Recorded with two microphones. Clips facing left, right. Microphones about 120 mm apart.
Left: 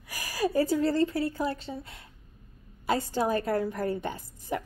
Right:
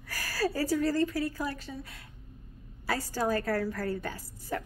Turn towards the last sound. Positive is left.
turn(degrees=20)  # may be behind; listen again after turning